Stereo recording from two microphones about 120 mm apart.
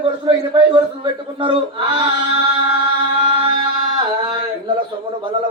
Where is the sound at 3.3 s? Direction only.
45° right (ahead or behind).